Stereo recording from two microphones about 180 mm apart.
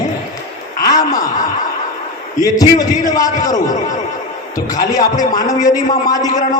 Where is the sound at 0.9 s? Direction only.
20° left (ahead or behind).